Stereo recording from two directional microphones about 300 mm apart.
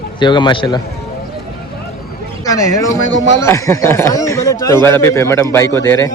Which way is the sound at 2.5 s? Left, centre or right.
Centre.